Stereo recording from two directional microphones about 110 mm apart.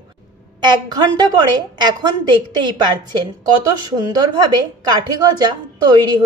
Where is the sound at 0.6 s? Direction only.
40° right (ahead or behind).